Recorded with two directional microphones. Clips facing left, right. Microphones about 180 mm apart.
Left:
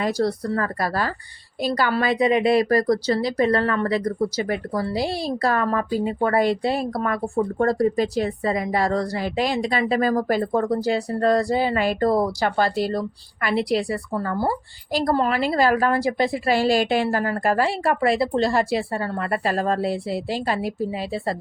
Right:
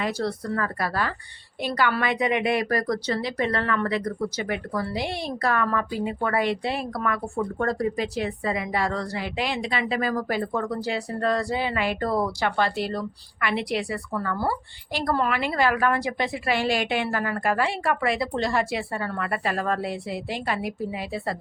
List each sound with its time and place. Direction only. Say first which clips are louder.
0.0 s speech: left 5 dB; 40° left (ahead or behind)